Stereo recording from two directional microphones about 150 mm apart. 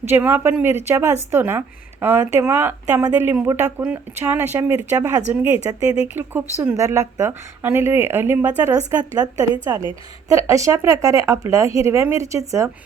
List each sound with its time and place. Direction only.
0.1 s speech: 15° right (ahead or behind)